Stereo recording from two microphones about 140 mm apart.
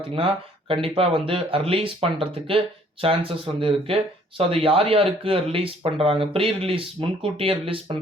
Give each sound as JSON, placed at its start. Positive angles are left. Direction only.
{"t": 0.7, "sound": "speech", "side_deg": -40}